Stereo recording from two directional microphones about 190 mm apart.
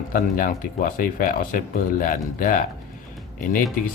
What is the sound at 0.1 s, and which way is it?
Speech, 45° left (ahead or behind).